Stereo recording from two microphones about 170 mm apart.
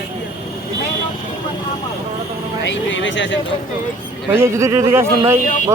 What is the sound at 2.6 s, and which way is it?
Speech, 90° left.